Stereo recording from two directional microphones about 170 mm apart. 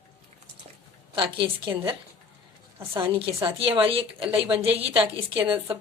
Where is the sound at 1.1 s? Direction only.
30° right (ahead or behind).